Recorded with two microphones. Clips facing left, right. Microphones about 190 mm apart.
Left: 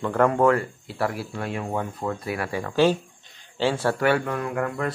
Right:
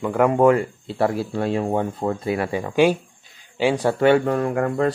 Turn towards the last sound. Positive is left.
turn(degrees=-30)  # may be behind; listen again after turning